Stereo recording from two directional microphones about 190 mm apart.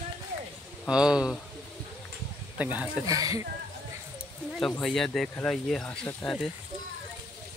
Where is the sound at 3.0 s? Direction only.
20° right (ahead or behind).